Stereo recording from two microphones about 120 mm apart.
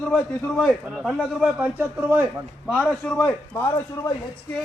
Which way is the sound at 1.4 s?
15° right (ahead or behind).